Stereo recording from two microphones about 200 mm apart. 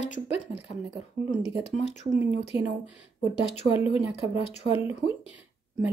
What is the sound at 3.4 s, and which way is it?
Speech, 30° left (ahead or behind).